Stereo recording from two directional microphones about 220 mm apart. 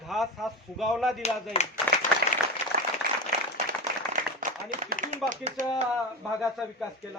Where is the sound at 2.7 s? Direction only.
45° right (ahead or behind).